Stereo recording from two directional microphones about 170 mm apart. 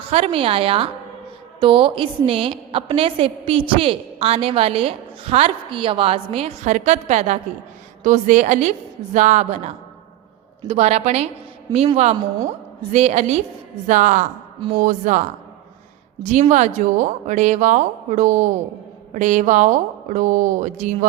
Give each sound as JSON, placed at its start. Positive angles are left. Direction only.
{"t": 0.1, "sound": "a woman's voice", "side_deg": -35}
{"t": 16.2, "sound": "a woman's voice", "side_deg": -45}